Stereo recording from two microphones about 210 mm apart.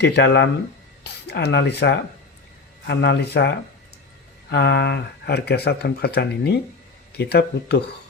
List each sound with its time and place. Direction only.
0.0 s speech: 55° left (ahead or behind)